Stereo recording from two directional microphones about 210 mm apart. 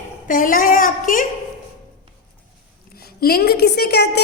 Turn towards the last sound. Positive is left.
turn(degrees=50)  # may be behind; listen again after turning